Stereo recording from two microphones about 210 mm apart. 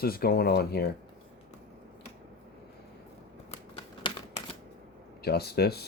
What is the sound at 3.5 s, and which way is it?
Shuffling cards, 25° left (ahead or behind).